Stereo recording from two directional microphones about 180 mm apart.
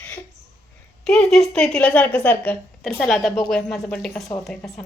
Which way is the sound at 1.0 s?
5° left (ahead or behind).